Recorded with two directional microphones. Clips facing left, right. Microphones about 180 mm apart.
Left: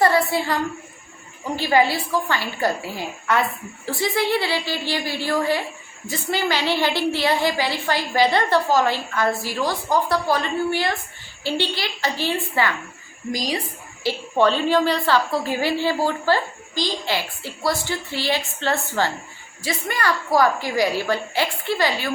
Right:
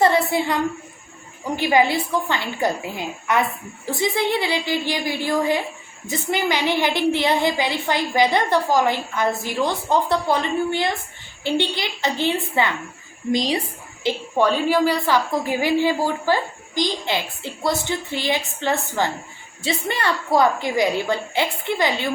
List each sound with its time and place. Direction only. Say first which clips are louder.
0.0 s a woman's voice: right 1 dB; 20° right (ahead or behind)
1.5 s a woman's voice: right 1 dB; 15° right (ahead or behind)
14.0 s a woman's voice: left 1 dB; 15° right (ahead or behind)